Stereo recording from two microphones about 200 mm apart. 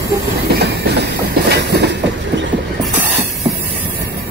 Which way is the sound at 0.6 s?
50° right (ahead or behind).